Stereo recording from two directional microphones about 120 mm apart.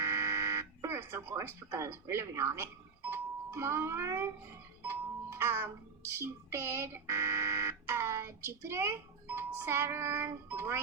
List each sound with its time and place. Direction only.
0.0 s buzzer: 25° right (ahead or behind)
3.1 s speech: 20° right (ahead or behind)